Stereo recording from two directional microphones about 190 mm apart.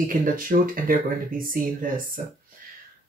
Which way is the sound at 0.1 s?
45° right (ahead or behind).